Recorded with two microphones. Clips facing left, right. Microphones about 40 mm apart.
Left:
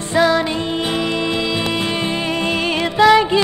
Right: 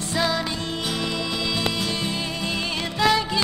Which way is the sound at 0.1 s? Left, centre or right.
Left.